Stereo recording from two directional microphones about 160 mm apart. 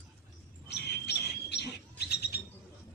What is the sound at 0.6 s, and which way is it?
Bird, 90° left.